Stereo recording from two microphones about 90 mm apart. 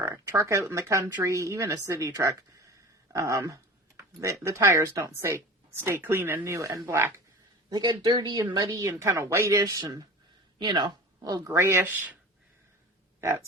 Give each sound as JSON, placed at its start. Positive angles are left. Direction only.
{"t": 0.0, "sound": "speech", "side_deg": -30}
{"t": 7.7, "sound": "speech", "side_deg": -55}
{"t": 10.6, "sound": "speech", "side_deg": -55}
{"t": 13.2, "sound": "speech", "side_deg": -30}